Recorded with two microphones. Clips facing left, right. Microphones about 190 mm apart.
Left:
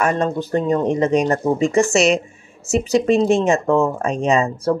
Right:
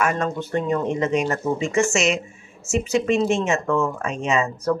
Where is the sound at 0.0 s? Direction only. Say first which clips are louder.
Left 4 dB; 35° left (ahead or behind).